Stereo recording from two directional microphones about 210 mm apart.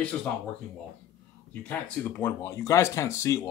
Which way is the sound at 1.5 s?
10° left (ahead or behind).